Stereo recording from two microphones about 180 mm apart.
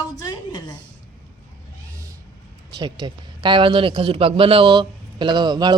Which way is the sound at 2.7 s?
25° right (ahead or behind).